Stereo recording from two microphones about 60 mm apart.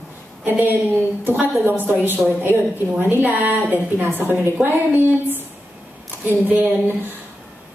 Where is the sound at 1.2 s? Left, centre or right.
Right.